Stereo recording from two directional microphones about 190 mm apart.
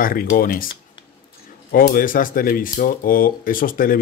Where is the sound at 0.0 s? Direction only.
50° left (ahead or behind).